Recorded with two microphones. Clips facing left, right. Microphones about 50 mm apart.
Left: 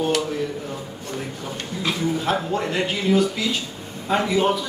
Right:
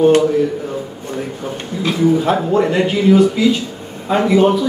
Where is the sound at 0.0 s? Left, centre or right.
Right.